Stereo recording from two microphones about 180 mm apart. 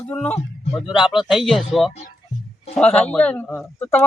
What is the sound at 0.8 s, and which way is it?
Speech, 5° right (ahead or behind).